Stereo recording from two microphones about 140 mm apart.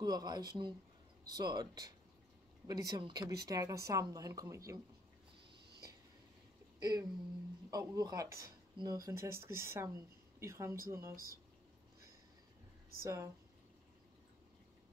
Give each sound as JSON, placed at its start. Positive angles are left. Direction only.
{"t": 0.0, "sound": "speech", "side_deg": -30}
{"t": 6.8, "sound": "a sound", "side_deg": -25}
{"t": 7.7, "sound": "speech", "side_deg": -25}
{"t": 13.0, "sound": "speech", "side_deg": -20}